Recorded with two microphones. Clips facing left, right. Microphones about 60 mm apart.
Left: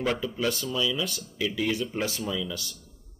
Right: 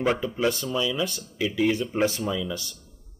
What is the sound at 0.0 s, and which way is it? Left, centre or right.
Speech, right.